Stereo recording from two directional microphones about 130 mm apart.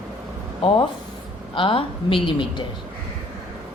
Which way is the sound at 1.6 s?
40° left (ahead or behind).